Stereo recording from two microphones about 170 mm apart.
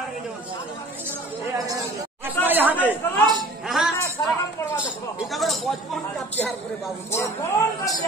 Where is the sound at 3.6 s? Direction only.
Centre (ahead or behind).